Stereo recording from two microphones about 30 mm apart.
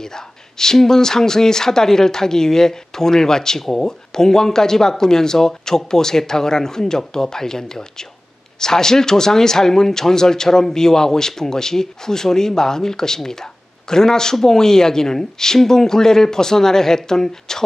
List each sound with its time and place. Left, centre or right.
0.0 s speech: centre